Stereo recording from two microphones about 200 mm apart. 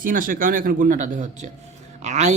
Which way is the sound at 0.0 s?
45° right (ahead or behind).